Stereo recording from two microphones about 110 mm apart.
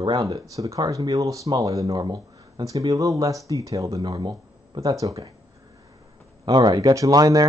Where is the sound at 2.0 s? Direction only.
45° right (ahead or behind).